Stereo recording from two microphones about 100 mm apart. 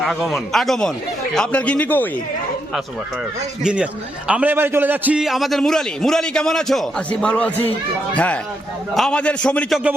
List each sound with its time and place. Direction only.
0.0 s a man's voice: centre (ahead or behind); by 2.0 s 15° left (ahead or behind)
3.6 s a man's voice: 10° right (ahead or behind)
5.2 s a man's voice: centre (ahead or behind)